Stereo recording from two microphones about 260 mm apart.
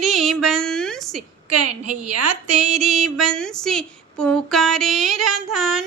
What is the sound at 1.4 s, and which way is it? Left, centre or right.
A woman's voice, right.